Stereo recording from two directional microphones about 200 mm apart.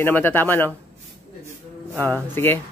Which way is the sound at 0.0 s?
10° left (ahead or behind).